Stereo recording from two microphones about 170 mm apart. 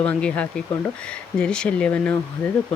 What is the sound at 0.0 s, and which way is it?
Speech, 5° left (ahead or behind).